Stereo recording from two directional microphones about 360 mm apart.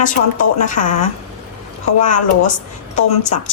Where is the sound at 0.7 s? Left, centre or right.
Left.